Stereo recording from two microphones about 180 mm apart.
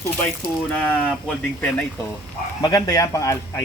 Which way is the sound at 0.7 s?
5° left (ahead or behind).